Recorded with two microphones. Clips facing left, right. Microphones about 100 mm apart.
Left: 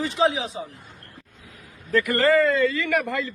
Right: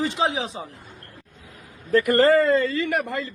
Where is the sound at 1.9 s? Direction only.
40° right (ahead or behind).